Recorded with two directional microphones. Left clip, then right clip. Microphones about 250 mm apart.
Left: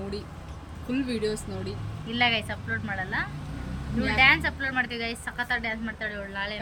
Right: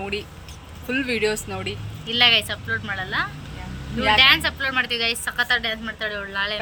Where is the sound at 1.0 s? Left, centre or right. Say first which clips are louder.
Right 8 dB; right.